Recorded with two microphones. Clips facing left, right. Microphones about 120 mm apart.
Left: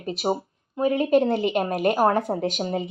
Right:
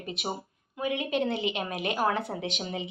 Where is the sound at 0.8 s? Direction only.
40° left (ahead or behind).